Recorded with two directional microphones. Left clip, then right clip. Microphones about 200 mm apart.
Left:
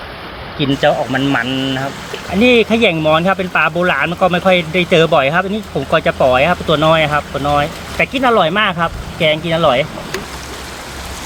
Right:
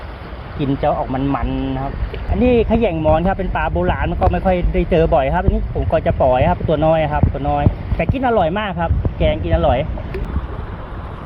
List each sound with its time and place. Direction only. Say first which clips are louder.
0.6 s speech: left 4 dB; 5° right (ahead or behind)